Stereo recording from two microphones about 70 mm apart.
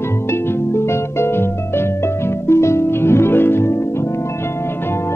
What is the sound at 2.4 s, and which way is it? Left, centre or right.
Harp, left.